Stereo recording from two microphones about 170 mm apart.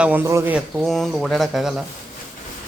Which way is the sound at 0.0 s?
10° right (ahead or behind).